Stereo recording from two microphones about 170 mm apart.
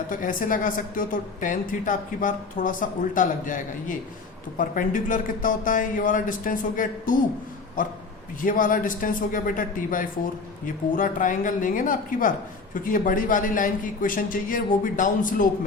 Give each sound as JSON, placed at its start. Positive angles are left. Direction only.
{"t": 0.1, "sound": "speech", "side_deg": 55}